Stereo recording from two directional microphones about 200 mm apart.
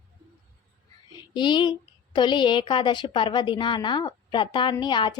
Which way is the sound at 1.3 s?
25° left (ahead or behind).